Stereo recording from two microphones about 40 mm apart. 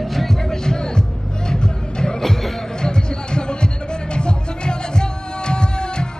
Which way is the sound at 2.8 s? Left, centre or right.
Left.